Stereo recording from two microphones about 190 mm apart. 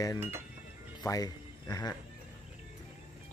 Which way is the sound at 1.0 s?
20° left (ahead or behind).